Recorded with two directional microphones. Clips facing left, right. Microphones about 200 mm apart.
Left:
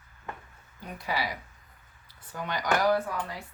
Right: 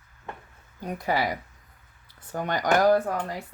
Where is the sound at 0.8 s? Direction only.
45° right (ahead or behind).